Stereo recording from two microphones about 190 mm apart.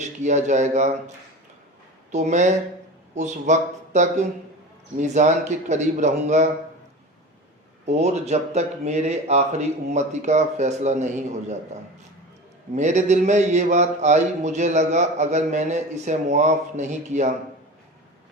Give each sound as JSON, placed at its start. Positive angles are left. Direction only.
{"t": 0.0, "sound": "a man's voice", "side_deg": -40}
{"t": 2.1, "sound": "a man's voice", "side_deg": -40}
{"t": 7.9, "sound": "a man's voice", "side_deg": -35}
{"t": 12.7, "sound": "a man's voice", "side_deg": -40}